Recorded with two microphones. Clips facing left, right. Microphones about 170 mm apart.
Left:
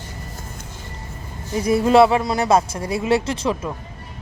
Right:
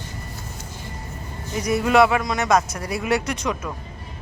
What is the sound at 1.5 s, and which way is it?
Speech, 30° left (ahead or behind).